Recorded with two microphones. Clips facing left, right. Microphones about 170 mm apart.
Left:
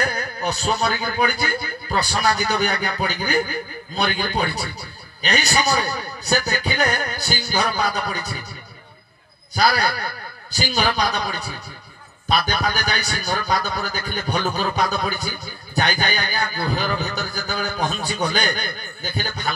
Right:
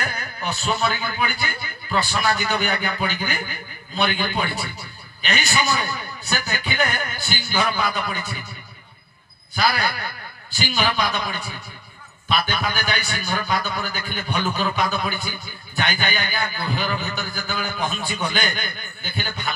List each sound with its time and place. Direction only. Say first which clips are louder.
0.0 s a man's voice: left 5 dB; 40° left (ahead or behind)
9.6 s a man's voice: left 3 dB; 40° left (ahead or behind)